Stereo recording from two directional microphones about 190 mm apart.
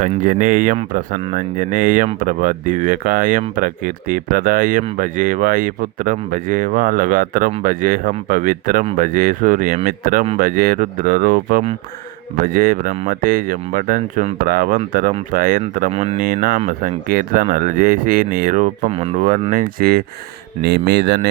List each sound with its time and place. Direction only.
0.0 s speech: 45° right (ahead or behind)
15.9 s speech: 35° right (ahead or behind)
16.2 s speech: 45° right (ahead or behind)